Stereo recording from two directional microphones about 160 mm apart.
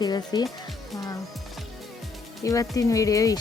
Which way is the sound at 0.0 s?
25° left (ahead or behind).